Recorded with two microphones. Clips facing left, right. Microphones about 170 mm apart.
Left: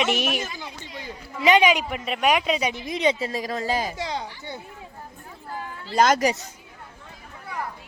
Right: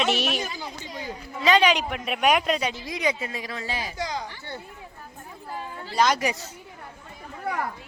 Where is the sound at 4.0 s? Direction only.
25° left (ahead or behind).